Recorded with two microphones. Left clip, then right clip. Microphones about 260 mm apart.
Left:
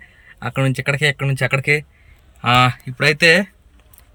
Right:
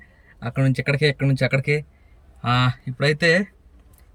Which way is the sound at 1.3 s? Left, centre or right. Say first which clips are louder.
Left 4 dB; centre.